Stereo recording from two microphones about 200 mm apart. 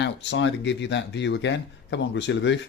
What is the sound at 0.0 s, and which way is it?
Speech, 65° left (ahead or behind).